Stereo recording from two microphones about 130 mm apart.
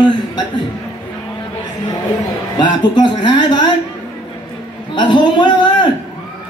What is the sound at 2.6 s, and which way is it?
Speech, 35° left (ahead or behind).